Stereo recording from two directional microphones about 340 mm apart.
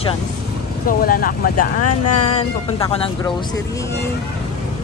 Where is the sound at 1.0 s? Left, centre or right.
Left.